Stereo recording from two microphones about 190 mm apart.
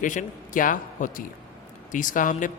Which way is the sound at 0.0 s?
45° left (ahead or behind).